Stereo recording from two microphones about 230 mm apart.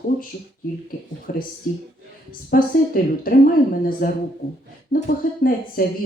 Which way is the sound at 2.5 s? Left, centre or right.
Left.